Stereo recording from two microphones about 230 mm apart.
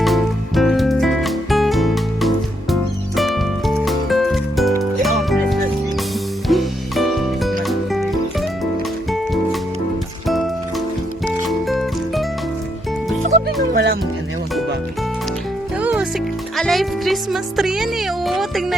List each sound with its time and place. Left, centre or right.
0.0 s music: centre
13.7 s music: right
15.8 s music: centre